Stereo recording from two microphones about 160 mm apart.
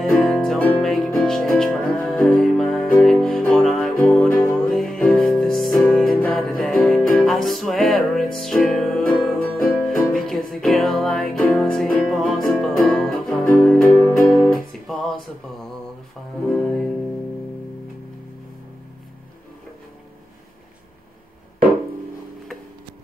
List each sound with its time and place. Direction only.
0.0 s music: centre (ahead or behind)
16.4 s music: 5° left (ahead or behind)